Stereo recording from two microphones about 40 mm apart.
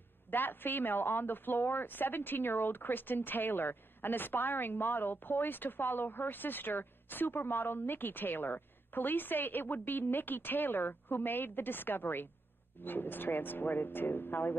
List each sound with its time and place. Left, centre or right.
0.3 s a woman's voice: left